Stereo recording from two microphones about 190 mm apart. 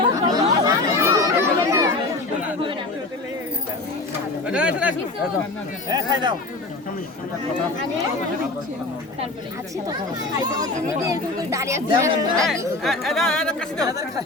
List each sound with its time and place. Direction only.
0.0 s chatter: 20° right (ahead or behind)
4.4 s a sound: 5° right (ahead or behind)
5.9 s speech: 20° right (ahead or behind)
10.5 s speech: 20° right (ahead or behind)
12.5 s speech: centre (ahead or behind)